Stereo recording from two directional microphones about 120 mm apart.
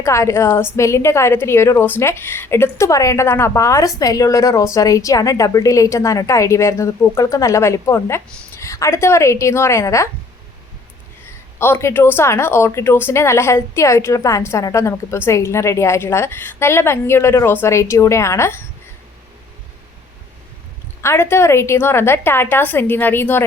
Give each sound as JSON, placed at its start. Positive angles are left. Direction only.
{"t": 0.0, "sound": "a woman's voice", "side_deg": 25}
{"t": 11.6, "sound": "a woman's voice", "side_deg": 20}
{"t": 21.0, "sound": "a woman's voice", "side_deg": 20}